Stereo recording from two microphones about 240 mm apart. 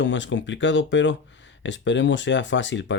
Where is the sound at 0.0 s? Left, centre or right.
Left.